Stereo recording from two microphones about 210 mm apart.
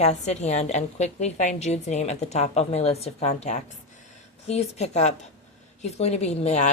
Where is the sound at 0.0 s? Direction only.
30° left (ahead or behind).